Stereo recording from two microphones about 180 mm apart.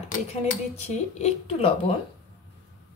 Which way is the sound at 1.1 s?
35° left (ahead or behind).